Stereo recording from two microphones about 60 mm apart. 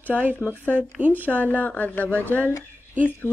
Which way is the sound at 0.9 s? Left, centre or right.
Right.